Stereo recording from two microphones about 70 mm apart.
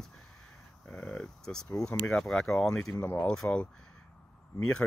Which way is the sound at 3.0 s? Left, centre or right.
Left.